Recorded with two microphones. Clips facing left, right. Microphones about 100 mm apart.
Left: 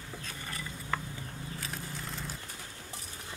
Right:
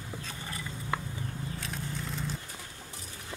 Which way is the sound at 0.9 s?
15° right (ahead or behind).